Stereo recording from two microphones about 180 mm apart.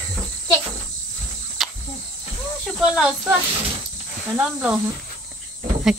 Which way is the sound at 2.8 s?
5° right (ahead or behind).